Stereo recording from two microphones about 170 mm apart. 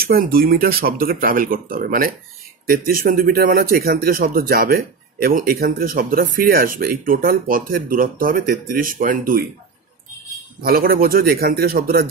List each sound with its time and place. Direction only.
0.0 s a man's voice: 60° right (ahead or behind)
10.6 s a man's voice: 60° right (ahead or behind)